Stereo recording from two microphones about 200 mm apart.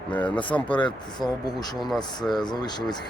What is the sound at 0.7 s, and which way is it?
A man's voice, 25° left (ahead or behind).